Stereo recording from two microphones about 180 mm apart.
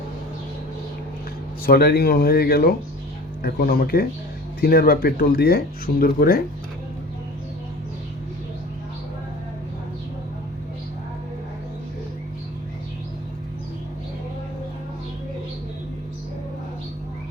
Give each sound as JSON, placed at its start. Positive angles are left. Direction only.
{"t": 1.6, "sound": "speech", "side_deg": 60}